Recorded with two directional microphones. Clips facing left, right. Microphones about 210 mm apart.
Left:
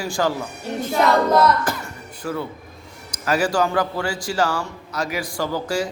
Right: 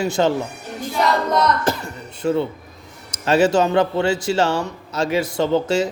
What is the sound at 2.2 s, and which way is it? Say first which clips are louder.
Speech: right 7 dB; 25° right (ahead or behind).